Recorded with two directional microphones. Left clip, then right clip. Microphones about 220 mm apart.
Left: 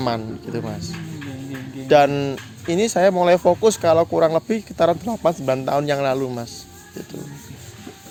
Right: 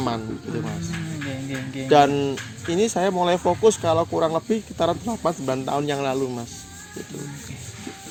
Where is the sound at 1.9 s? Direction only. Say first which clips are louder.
Left 2 dB; 45° left (ahead or behind).